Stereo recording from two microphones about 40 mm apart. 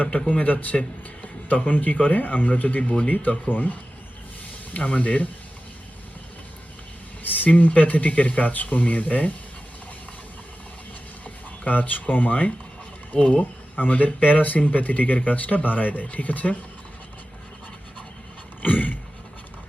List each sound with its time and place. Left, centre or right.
0.3 s speech: left
4.7 s speech: left
7.2 s speech: left
11.6 s speech: left
13.1 s speech: left
13.4 s speech: left
18.6 s a sound: left